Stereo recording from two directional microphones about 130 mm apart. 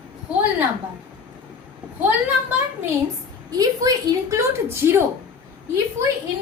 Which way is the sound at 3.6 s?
30° right (ahead or behind).